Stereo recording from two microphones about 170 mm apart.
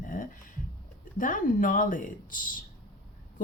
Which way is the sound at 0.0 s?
55° left (ahead or behind).